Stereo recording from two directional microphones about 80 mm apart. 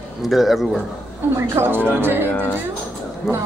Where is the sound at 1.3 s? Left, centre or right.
Right.